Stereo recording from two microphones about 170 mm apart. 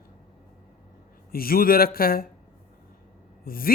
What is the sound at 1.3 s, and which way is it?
Speech, 60° left (ahead or behind).